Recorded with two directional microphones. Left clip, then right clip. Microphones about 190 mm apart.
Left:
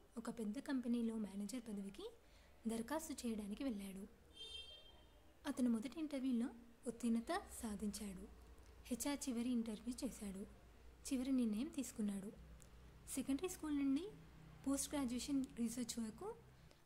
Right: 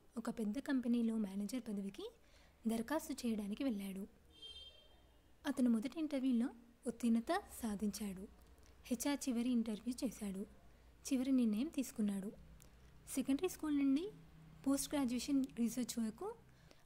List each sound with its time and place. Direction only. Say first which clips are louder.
0.1 s a woman's voice: right 5 dB; 35° right (ahead or behind)
5.4 s a woman's voice: right 4 dB; 35° right (ahead or behind)